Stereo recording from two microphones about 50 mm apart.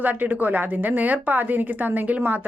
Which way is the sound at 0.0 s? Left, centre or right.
Right.